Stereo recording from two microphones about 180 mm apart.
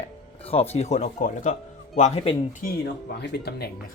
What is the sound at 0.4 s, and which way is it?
Speech, 35° left (ahead or behind).